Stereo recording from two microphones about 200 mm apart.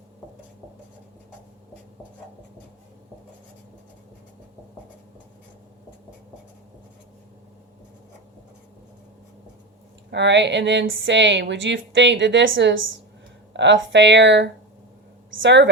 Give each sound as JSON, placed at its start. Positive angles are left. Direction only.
{"t": 10.1, "sound": "a woman's voice", "side_deg": -60}
{"t": 13.5, "sound": "a sound", "side_deg": -60}
{"t": 13.9, "sound": "a woman's voice", "side_deg": -65}